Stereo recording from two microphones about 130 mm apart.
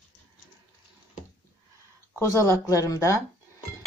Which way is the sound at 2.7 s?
25° left (ahead or behind).